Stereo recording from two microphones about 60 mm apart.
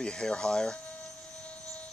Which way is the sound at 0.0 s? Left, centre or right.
Centre.